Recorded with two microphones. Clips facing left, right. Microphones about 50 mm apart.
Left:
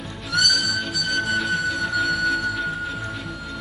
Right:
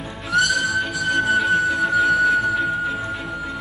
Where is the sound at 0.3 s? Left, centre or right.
Right.